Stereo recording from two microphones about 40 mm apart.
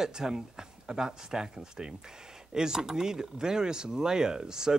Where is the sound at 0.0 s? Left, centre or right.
Centre.